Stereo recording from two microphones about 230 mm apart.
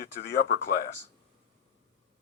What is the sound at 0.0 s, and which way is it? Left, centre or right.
Speech, left.